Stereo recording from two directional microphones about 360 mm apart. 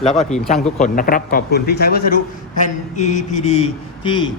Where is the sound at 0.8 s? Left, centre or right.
Left.